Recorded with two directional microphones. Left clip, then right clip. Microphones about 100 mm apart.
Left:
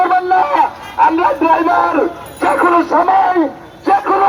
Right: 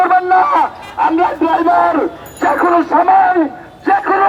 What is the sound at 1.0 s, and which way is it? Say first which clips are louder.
Music: left 2 dB; 25° right (ahead or behind).